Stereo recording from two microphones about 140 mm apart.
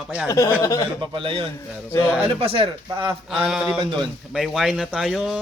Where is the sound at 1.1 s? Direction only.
40° right (ahead or behind).